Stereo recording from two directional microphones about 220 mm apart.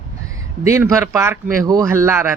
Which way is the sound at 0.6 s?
15° right (ahead or behind).